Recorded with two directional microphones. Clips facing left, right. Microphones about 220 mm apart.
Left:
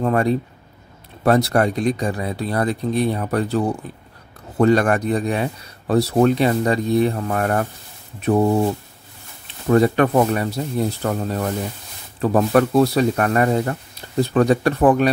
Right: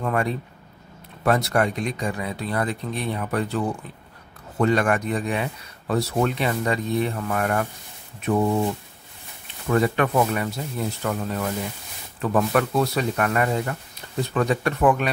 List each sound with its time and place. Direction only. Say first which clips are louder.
0.0 s speech: left 6 dB; 35° left (ahead or behind)
9.7 s speech: left 6 dB; 35° left (ahead or behind)